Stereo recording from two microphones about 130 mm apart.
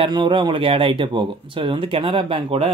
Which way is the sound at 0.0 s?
40° right (ahead or behind).